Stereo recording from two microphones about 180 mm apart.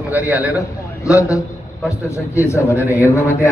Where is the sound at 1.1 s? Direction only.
15° left (ahead or behind).